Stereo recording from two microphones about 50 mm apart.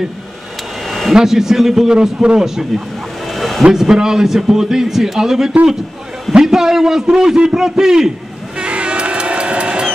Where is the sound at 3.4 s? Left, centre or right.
Centre.